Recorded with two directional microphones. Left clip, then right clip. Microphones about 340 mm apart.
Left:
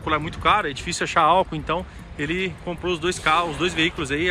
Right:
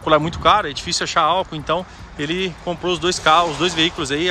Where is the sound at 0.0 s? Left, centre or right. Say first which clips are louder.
Right 7 dB; centre.